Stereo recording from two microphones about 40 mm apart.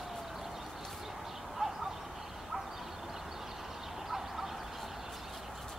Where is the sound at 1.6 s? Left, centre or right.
Centre.